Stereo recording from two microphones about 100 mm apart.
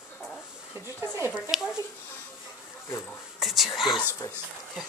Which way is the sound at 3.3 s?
Centre (ahead or behind).